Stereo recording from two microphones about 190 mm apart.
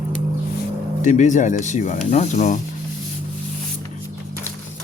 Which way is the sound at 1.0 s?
40° left (ahead or behind).